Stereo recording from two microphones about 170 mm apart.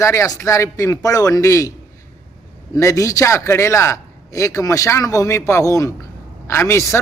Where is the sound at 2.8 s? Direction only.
20° left (ahead or behind).